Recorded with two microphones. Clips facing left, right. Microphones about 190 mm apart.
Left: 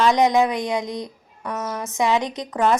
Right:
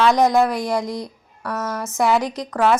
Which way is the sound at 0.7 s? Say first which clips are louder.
Right 2 dB; 20° left (ahead or behind).